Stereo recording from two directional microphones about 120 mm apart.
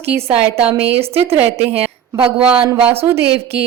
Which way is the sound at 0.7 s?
15° right (ahead or behind).